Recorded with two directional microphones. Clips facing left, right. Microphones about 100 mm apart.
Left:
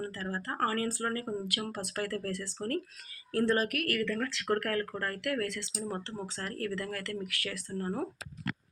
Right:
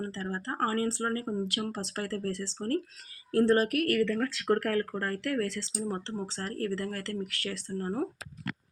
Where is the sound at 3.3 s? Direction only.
35° right (ahead or behind).